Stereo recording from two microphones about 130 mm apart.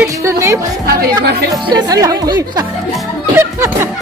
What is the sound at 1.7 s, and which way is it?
Speech, 30° right (ahead or behind).